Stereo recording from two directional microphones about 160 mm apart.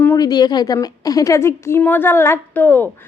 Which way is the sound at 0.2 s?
25° left (ahead or behind).